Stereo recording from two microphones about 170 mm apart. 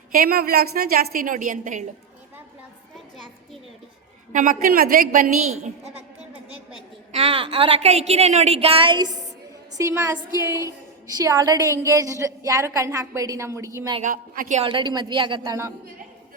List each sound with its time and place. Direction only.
0.1 s a woman's voice: 60° right (ahead or behind)
4.3 s a woman's voice: 50° right (ahead or behind)
7.1 s a woman's voice: 35° right (ahead or behind); by 13.7 s 15° right (ahead or behind)
14.0 s a woman's voice: 50° right (ahead or behind)
14.6 s a woman's voice: 30° right (ahead or behind)